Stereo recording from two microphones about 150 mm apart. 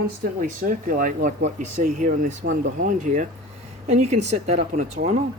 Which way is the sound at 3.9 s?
45° right (ahead or behind).